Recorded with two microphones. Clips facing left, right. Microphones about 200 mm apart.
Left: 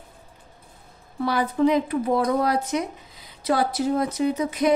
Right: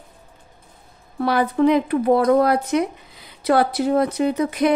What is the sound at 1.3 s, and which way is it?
Speech, 60° right (ahead or behind).